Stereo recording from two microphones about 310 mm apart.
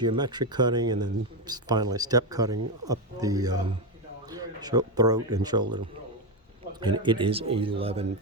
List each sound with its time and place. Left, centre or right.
0.0 s speech: centre
6.7 s speech: centre